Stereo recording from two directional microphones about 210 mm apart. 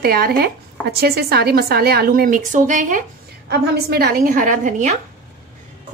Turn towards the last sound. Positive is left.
turn(degrees=-35)  # may be behind; listen again after turning